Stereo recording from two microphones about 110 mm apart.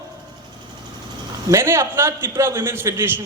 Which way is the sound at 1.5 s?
20° right (ahead or behind).